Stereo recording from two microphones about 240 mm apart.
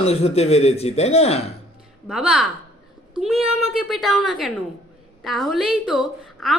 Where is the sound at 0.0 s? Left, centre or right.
Left.